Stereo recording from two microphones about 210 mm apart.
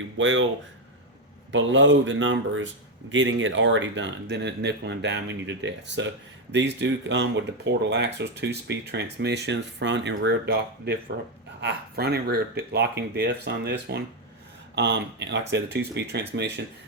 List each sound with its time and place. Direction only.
0.2 s speech: 65° right (ahead or behind)
1.5 s speech: 65° right (ahead or behind)